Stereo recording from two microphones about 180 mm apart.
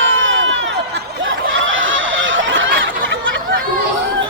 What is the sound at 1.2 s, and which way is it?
Snicker, 90° right.